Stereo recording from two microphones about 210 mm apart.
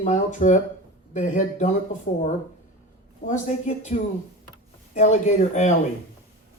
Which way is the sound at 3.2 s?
35° left (ahead or behind).